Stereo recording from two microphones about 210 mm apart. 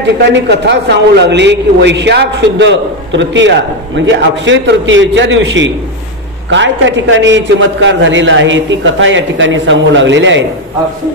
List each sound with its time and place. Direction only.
0.3 s a man's voice: 55° right (ahead or behind)